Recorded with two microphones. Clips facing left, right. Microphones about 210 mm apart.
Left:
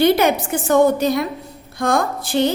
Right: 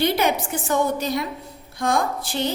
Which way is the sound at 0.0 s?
60° left (ahead or behind).